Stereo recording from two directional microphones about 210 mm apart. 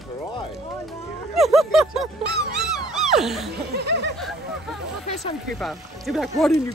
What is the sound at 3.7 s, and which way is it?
Speech, 50° right (ahead or behind).